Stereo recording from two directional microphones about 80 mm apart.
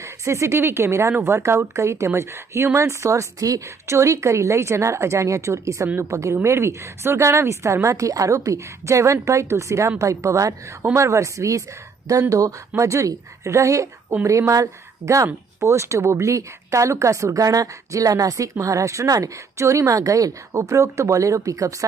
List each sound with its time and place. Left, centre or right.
0.0 s speech: right